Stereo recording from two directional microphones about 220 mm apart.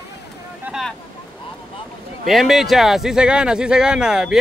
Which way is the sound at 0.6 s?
Centre (ahead or behind).